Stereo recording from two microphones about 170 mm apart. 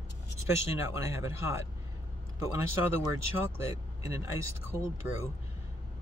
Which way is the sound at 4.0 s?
20° right (ahead or behind).